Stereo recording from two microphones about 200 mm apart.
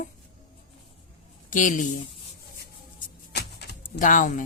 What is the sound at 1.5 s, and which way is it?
Speech, 40° left (ahead or behind).